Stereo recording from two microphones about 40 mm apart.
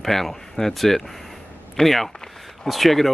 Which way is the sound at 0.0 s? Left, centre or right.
Centre.